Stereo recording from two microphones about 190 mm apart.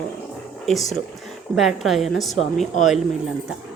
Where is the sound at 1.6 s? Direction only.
Centre (ahead or behind).